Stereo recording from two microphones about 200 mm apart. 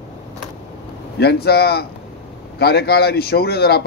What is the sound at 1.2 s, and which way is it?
A man's voice, 55° left (ahead or behind).